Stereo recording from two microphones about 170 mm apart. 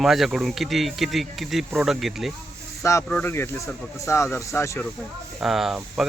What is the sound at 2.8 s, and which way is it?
A man's voice, 15° left (ahead or behind).